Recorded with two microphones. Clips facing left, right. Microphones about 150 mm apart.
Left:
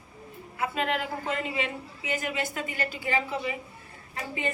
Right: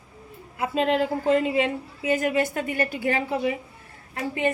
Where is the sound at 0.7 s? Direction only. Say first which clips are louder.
Right 10 dB; 35° right (ahead or behind).